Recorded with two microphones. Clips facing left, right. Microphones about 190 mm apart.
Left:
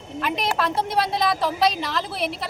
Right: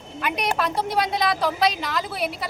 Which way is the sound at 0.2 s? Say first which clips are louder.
Even; centre (ahead or behind).